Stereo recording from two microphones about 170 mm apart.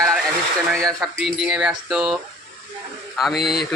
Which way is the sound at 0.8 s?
Centre (ahead or behind).